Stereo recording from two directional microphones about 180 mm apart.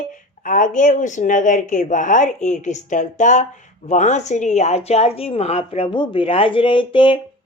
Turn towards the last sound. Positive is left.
turn(degrees=30)  # may be behind; listen again after turning